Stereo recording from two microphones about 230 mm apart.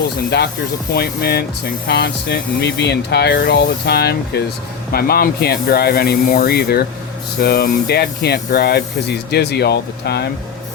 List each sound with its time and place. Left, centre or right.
0.9 s speech: left